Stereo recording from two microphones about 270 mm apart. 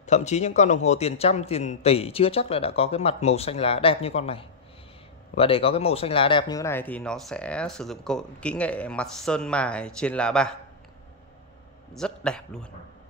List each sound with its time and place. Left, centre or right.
0.0 s a man's voice: left; by 10.5 s centre
11.9 s a man's voice: centre